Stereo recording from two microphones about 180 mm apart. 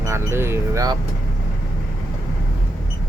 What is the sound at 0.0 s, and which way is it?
Speech, 15° right (ahead or behind).